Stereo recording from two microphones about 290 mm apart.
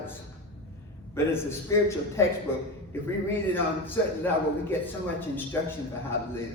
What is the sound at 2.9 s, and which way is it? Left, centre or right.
Speech, centre.